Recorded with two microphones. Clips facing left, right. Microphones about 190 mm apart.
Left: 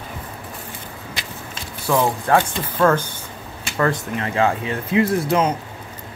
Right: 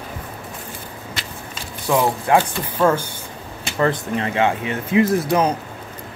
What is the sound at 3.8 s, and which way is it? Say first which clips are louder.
Speech: right 1 dB; 25° right (ahead or behind).